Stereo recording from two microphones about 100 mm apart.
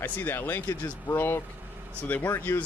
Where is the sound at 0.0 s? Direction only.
20° left (ahead or behind).